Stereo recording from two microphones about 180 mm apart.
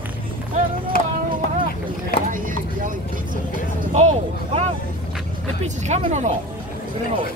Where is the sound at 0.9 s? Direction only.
55° left (ahead or behind).